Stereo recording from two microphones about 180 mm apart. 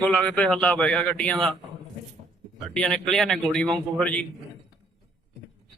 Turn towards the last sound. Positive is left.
turn(degrees=5)  # may be behind; listen again after turning